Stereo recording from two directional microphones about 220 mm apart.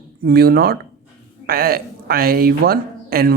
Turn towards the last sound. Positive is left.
turn(degrees=-45)  # may be behind; listen again after turning